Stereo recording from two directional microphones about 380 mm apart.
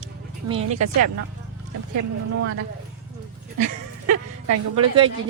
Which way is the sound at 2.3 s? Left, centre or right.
Right.